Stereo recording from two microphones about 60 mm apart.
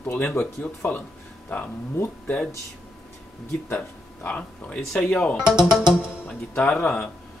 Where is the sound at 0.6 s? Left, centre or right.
Left.